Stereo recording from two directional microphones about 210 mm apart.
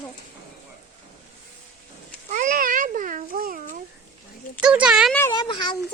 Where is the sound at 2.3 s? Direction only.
40° right (ahead or behind).